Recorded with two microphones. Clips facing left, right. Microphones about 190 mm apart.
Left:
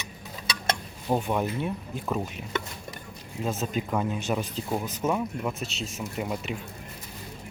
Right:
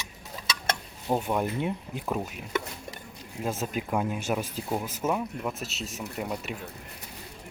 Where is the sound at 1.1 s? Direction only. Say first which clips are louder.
Left 1 dB; 5° right (ahead or behind).